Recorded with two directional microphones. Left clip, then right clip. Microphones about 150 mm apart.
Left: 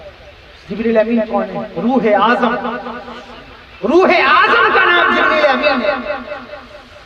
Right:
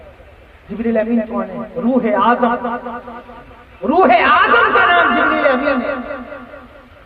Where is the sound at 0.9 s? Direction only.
20° right (ahead or behind).